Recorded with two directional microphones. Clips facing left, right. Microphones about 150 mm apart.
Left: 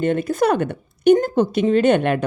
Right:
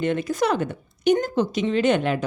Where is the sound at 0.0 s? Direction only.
50° left (ahead or behind).